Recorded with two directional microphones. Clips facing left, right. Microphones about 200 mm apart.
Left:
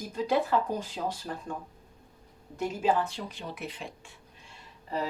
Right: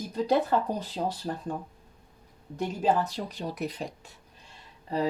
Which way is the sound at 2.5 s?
40° right (ahead or behind).